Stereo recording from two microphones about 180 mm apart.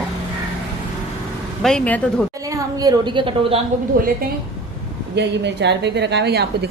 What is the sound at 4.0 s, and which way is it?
Speech, 55° right (ahead or behind).